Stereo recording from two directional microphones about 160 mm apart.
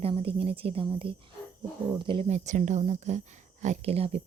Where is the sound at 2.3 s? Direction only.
50° right (ahead or behind).